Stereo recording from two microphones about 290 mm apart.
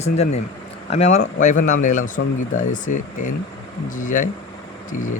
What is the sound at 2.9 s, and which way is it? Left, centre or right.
Speech, left.